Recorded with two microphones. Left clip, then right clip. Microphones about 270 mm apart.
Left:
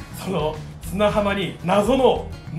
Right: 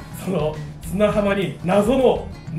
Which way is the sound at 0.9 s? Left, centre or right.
Centre.